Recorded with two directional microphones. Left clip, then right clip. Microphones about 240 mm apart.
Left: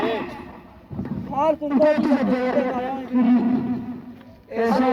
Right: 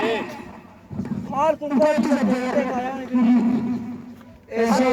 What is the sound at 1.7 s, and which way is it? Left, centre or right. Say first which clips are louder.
A man's voice: left 1 dB; right.